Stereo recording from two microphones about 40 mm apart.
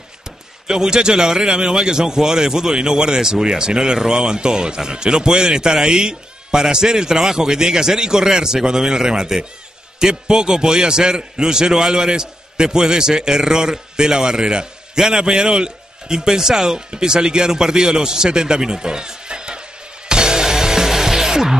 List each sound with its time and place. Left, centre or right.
0.7 s a man's voice: centre
20.1 s music: centre